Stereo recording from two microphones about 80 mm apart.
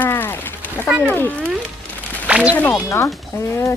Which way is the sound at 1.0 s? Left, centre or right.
Left.